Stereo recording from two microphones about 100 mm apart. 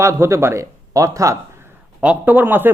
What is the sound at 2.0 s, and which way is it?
Speech, 15° right (ahead or behind).